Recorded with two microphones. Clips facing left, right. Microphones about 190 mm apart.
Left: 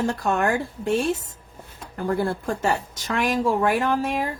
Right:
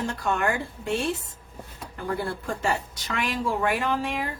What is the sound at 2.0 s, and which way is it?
Speech, 45° left (ahead or behind).